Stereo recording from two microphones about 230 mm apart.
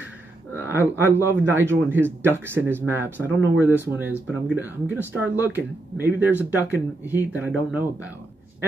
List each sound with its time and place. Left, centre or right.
0.6 s a man's voice: centre